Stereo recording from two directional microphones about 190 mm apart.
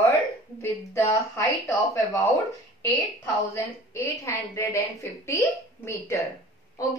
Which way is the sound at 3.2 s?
15° left (ahead or behind).